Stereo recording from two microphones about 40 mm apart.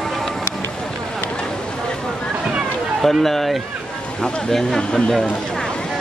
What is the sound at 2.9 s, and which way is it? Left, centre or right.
Speech, centre.